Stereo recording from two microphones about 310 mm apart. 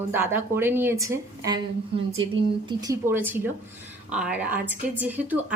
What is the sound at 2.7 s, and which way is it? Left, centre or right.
A woman's voice, centre.